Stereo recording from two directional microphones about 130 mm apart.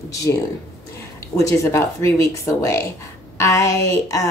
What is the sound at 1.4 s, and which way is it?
Speech, 25° left (ahead or behind).